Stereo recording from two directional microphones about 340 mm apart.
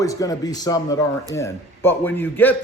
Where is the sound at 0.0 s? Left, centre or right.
Centre.